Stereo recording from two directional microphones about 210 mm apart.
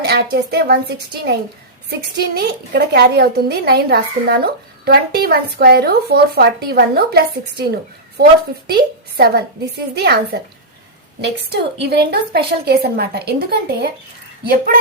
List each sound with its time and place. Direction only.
0.0 s a woman's voice: 50° right (ahead or behind)